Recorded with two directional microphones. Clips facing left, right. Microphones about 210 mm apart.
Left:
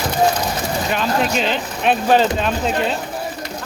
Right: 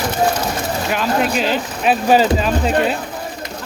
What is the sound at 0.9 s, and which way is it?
Speech, 5° right (ahead or behind).